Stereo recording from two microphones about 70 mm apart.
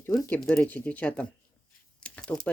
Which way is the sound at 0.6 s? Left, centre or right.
Left.